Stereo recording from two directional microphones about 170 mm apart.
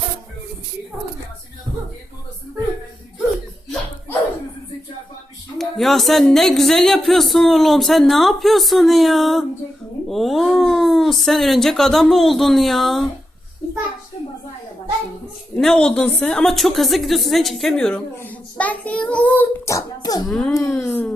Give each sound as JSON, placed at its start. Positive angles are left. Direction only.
{"t": 5.5, "sound": "a woman's voice", "side_deg": 0}
{"t": 15.5, "sound": "a woman's voice", "side_deg": 5}
{"t": 20.2, "sound": "a woman's voice", "side_deg": 5}
{"t": 20.5, "sound": "speech", "side_deg": 20}